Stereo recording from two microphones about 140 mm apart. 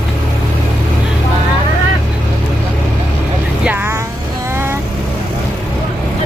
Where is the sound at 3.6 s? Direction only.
15° right (ahead or behind).